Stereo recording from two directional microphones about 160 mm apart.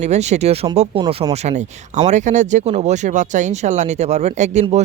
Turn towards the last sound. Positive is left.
turn(degrees=-45)  # may be behind; listen again after turning